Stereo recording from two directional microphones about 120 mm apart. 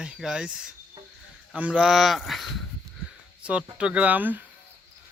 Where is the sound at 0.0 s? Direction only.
5° right (ahead or behind).